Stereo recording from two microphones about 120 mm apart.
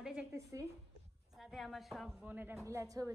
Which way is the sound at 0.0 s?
10° right (ahead or behind).